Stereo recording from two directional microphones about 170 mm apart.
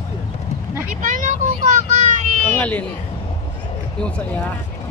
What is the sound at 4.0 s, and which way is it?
Speech, 10° left (ahead or behind).